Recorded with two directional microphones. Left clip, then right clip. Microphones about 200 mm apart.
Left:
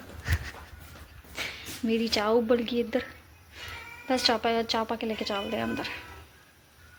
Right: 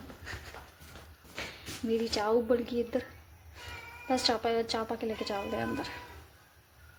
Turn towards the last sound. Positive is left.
turn(degrees=5)  # may be behind; listen again after turning